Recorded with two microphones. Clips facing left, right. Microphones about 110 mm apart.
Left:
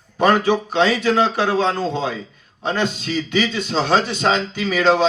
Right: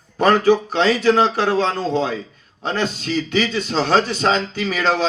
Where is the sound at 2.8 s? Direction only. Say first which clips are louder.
Right 2 dB; 35° right (ahead or behind).